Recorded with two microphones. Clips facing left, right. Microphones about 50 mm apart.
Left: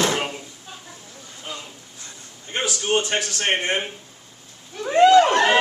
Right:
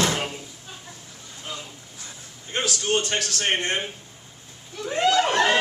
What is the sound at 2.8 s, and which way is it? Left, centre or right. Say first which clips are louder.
A man's voice: left 4 dB; centre.